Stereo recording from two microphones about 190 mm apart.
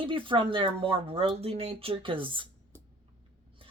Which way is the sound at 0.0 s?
25° right (ahead or behind).